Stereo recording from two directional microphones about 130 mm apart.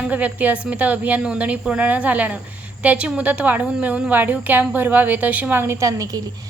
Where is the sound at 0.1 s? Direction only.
10° right (ahead or behind).